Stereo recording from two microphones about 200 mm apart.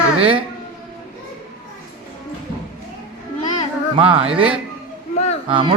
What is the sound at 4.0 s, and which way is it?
Speech, 25° right (ahead or behind).